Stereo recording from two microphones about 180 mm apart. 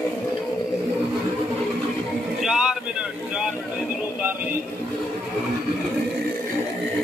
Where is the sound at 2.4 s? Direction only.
5° right (ahead or behind).